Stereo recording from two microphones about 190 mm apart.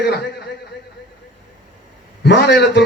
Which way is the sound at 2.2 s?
65° left (ahead or behind).